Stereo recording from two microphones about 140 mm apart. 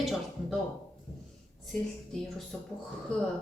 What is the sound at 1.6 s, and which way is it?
Speech, 5° left (ahead or behind).